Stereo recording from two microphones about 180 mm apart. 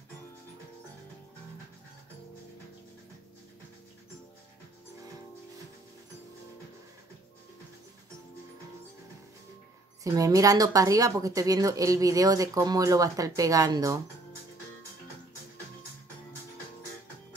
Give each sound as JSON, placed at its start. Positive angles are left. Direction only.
{"t": 10.0, "sound": "speech", "side_deg": -20}